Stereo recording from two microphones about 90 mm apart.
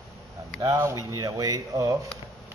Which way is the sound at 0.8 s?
40° right (ahead or behind).